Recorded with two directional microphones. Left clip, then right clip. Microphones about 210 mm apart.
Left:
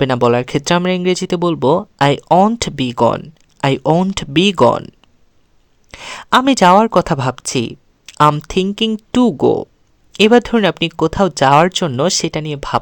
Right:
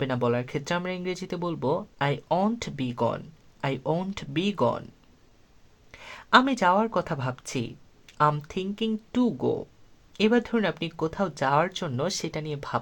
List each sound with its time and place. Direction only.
0.0 s speech: 55° left (ahead or behind)
5.9 s speech: 50° left (ahead or behind)